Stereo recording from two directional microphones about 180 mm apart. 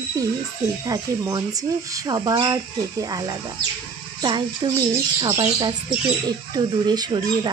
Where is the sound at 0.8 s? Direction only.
20° right (ahead or behind).